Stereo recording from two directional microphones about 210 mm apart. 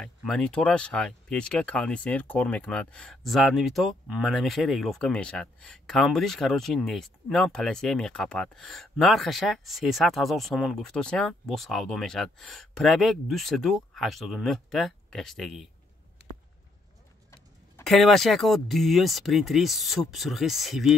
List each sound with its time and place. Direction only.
0.0 s speech: 5° left (ahead or behind)
17.8 s speech: centre (ahead or behind)